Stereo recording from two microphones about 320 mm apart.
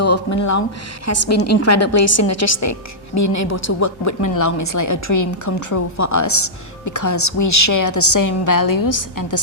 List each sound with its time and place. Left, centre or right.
0.0 s a woman's voice: left